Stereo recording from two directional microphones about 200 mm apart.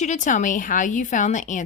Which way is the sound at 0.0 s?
40° left (ahead or behind).